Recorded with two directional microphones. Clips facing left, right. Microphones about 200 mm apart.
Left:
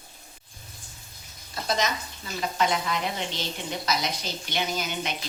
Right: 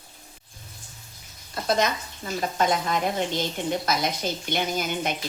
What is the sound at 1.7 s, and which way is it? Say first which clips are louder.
Speech: right 4 dB; 55° right (ahead or behind).